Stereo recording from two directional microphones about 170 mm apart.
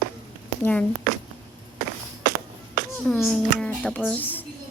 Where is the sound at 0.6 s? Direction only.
5° left (ahead or behind).